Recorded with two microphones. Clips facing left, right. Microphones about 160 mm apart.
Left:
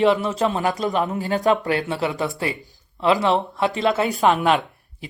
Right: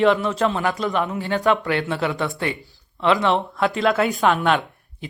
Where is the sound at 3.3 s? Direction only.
Centre (ahead or behind).